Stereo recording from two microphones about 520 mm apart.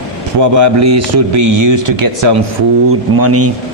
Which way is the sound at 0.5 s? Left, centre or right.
Right.